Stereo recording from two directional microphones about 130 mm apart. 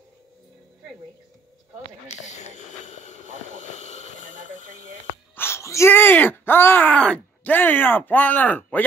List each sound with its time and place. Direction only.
2.1 s speech: 65° left (ahead or behind)
5.3 s speech: 20° left (ahead or behind)